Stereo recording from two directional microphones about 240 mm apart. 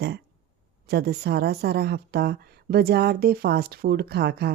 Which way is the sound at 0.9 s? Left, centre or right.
Right.